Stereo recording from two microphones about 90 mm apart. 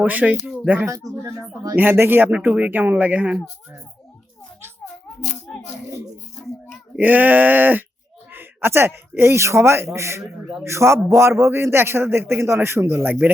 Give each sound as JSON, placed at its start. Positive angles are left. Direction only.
{"t": 0.0, "sound": "speech", "side_deg": -20}
{"t": 0.9, "sound": "a man's voice", "side_deg": -35}
{"t": 6.9, "sound": "a man's voice", "side_deg": -20}